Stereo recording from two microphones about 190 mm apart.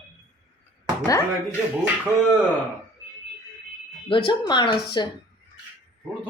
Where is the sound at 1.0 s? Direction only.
15° left (ahead or behind).